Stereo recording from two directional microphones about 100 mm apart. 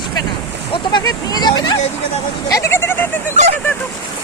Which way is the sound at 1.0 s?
40° left (ahead or behind).